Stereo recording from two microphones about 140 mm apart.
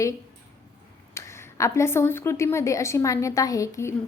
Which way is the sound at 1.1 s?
20° left (ahead or behind).